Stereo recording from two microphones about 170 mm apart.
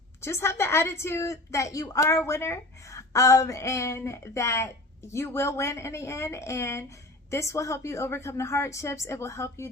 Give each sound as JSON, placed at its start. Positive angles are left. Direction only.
{"t": 0.2, "sound": "a woman's voice", "side_deg": 15}